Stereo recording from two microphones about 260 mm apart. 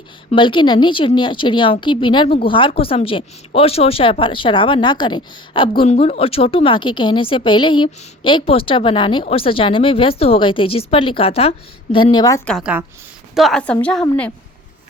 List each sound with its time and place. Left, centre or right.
0.3 s a woman's voice: centre
12.5 s a woman's voice: centre